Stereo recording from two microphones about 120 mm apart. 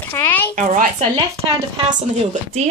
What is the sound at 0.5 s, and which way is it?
Speech, 90° right.